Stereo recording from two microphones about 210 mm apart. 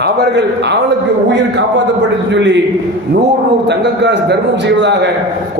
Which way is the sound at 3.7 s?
55° right (ahead or behind).